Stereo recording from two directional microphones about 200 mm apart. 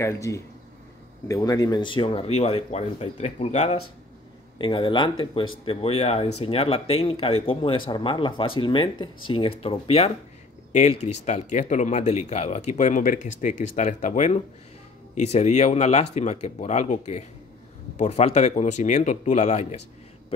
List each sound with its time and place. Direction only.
0.0 s a man's voice: 15° left (ahead or behind); by 19.8 s 35° left (ahead or behind)